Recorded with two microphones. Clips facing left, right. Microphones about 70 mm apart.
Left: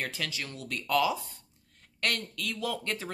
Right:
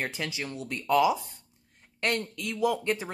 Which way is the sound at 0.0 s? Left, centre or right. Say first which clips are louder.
Right 3 dB; right.